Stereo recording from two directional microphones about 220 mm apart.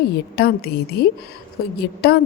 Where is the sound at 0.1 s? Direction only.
45° left (ahead or behind).